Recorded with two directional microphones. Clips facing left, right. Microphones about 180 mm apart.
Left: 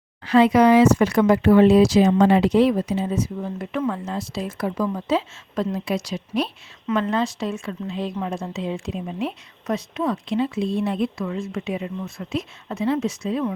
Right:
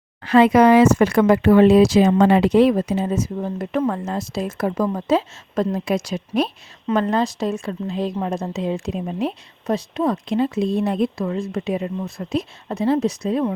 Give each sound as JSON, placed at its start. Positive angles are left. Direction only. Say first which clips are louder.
{"t": 0.3, "sound": "speech", "louder": "right 2 dB", "side_deg": -50}
{"t": 6.8, "sound": "a woman's voice", "louder": "right 3 dB", "side_deg": -40}